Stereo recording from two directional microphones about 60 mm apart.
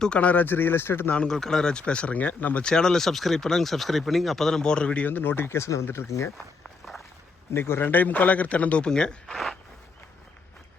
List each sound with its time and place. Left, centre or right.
0.0 s speech: centre; by 1.1 s left
1.1 s speech: centre
2.6 s speech: centre
5.0 s speech: left
5.8 s speech: left
6.1 s speech: left
7.5 s speech: left; by 9.1 s centre
9.2 s speech: centre